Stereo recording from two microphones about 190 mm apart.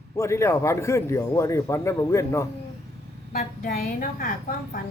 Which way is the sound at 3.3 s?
50° left (ahead or behind).